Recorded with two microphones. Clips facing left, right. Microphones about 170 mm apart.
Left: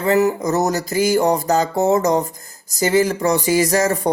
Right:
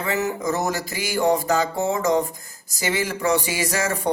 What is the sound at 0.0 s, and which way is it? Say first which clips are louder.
Speech: left 8 dB; 35° left (ahead or behind).